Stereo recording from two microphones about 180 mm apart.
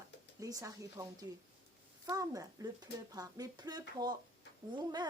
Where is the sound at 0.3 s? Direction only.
20° right (ahead or behind).